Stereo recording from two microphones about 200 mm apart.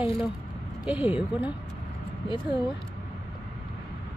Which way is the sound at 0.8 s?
5° right (ahead or behind).